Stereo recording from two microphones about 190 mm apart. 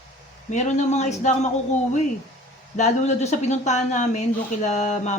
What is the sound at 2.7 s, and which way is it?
Speech, 35° left (ahead or behind).